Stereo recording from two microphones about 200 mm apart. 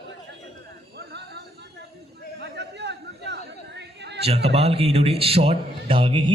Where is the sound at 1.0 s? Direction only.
55° right (ahead or behind).